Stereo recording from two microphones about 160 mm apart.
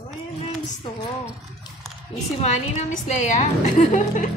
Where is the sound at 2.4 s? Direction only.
45° left (ahead or behind).